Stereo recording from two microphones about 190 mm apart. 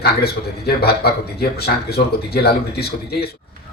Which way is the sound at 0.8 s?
55° left (ahead or behind).